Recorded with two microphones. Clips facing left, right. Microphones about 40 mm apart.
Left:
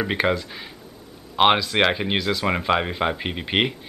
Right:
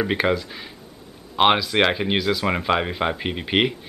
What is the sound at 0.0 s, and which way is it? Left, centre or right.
Speech, centre.